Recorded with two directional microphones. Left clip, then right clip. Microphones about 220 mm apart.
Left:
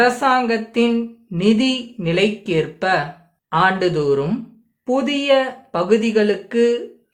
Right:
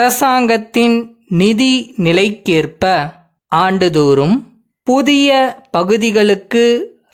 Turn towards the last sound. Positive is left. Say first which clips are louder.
# right 6 dB
turn(degrees=-50)  # may be behind; listen again after turning